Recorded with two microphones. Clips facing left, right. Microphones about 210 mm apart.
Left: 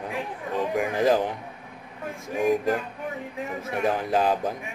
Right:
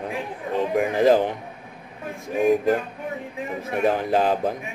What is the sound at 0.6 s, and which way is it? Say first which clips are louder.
Speech: right 4 dB; 25° right (ahead or behind).